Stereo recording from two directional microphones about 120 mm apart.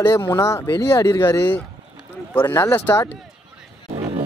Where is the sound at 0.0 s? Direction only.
20° left (ahead or behind).